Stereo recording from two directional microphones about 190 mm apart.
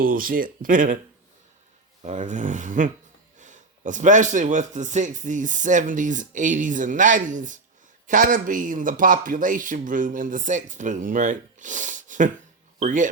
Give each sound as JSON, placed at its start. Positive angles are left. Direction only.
{"t": 0.0, "sound": "speech", "side_deg": -50}
{"t": 2.0, "sound": "speech", "side_deg": -40}